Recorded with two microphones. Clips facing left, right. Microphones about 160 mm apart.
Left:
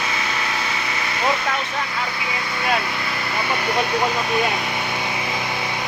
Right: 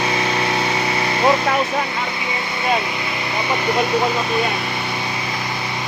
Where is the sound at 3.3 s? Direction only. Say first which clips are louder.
Right 2 dB; 15° right (ahead or behind).